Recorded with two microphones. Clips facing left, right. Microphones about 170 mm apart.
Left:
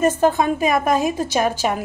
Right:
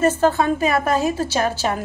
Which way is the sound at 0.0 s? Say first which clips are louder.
Even; 15° left (ahead or behind).